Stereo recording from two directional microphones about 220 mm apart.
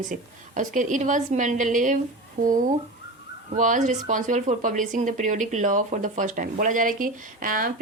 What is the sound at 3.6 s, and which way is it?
A woman's voice, 35° right (ahead or behind).